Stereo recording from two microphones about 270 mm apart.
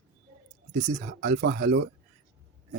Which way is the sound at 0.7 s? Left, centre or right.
Right.